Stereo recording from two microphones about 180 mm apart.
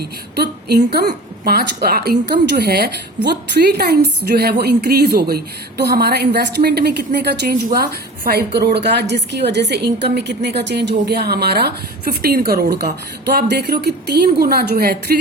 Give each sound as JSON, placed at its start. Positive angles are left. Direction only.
{"t": 0.0, "sound": "a woman's voice", "side_deg": -60}